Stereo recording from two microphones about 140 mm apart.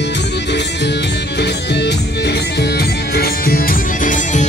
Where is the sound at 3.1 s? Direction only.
90° left; by 4.5 s 65° left (ahead or behind).